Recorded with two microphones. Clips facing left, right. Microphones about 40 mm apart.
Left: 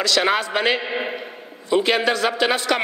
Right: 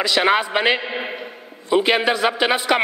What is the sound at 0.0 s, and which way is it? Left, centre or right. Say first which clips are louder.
A man's voice: right 2 dB; centre.